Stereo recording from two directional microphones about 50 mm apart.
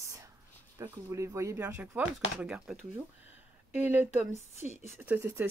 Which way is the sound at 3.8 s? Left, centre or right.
Right.